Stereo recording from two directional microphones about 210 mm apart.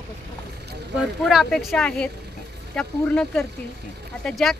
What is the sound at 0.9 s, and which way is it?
A man's voice, centre (ahead or behind).